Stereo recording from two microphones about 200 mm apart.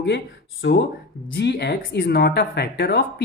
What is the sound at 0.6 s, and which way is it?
Speech, 60° left (ahead or behind).